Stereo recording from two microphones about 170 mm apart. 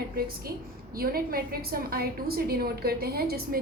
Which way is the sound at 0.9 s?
60° right (ahead or behind).